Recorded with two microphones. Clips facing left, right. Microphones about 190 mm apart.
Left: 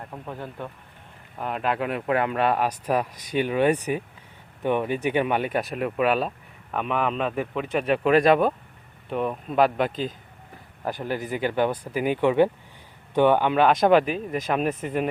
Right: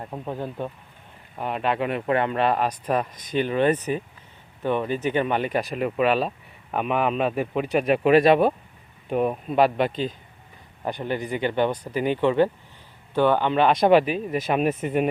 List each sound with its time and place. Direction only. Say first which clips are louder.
0.0 s a man's voice: right 5 dB; 20° right (ahead or behind)
1.4 s speech: right 1 dB; centre (ahead or behind)
6.7 s a man's voice: right 2 dB; 10° right (ahead or behind)